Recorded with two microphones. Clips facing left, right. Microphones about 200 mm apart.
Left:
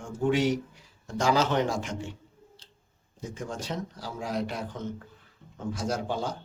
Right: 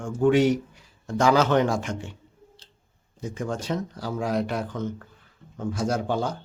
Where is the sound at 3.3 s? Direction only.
60° right (ahead or behind).